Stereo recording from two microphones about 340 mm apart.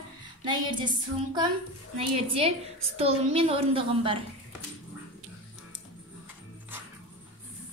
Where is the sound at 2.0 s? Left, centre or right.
Centre.